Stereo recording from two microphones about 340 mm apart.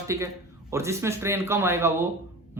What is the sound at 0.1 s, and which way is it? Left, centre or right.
A man's voice, centre.